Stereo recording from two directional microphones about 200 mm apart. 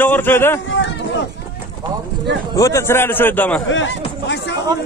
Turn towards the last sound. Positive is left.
turn(degrees=65)  # may be behind; listen again after turning